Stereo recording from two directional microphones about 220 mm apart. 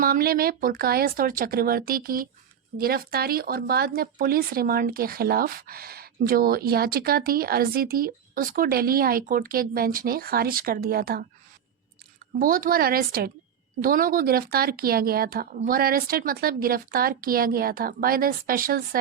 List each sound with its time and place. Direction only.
0.0 s speech: 40° right (ahead or behind)
12.4 s speech: 40° right (ahead or behind)